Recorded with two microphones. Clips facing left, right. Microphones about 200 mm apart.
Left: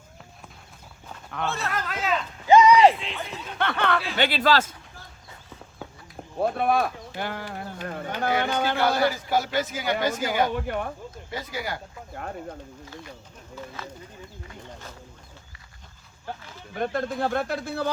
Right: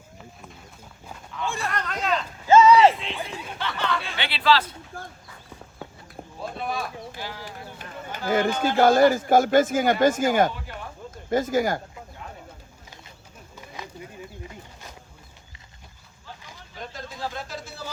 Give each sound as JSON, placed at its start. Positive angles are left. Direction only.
{"t": 1.6, "sound": "speech", "side_deg": 5}
{"t": 2.5, "sound": "a sound", "side_deg": 15}
{"t": 2.7, "sound": "speech", "side_deg": 0}
{"t": 3.6, "sound": "speech", "side_deg": 60}
{"t": 4.2, "sound": "speech", "side_deg": 45}
{"t": 4.9, "sound": "a sound", "side_deg": -50}
{"t": 6.4, "sound": "speech", "side_deg": 55}
{"t": 8.3, "sound": "a man's voice", "side_deg": -50}
{"t": 10.5, "sound": "speech", "side_deg": 55}
{"t": 11.3, "sound": "a man's voice", "side_deg": -45}
{"t": 12.1, "sound": "a sound", "side_deg": 60}
{"t": 16.4, "sound": "a sound", "side_deg": -15}
{"t": 16.7, "sound": "speech", "side_deg": 60}